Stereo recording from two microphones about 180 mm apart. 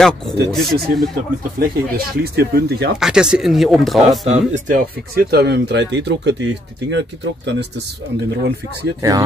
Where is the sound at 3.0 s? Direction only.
5° right (ahead or behind).